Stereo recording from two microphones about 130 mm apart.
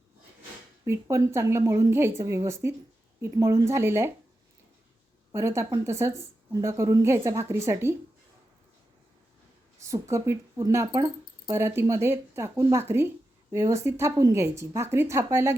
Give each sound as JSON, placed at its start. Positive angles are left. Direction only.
{"t": 0.9, "sound": "speech", "side_deg": -20}
{"t": 5.3, "sound": "speech", "side_deg": -20}
{"t": 9.9, "sound": "speech", "side_deg": -20}